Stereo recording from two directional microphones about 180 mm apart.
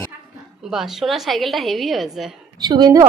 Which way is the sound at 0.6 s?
Centre (ahead or behind).